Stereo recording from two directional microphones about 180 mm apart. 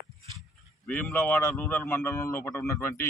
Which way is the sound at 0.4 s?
5° left (ahead or behind).